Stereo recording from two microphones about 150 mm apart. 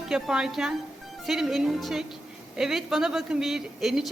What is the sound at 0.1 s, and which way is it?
Speech, 5° right (ahead or behind).